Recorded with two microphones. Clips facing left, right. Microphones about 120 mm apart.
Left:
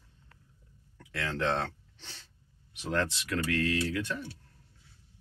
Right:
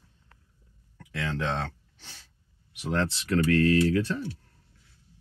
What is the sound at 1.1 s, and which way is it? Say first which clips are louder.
Speech: even; 15° right (ahead or behind).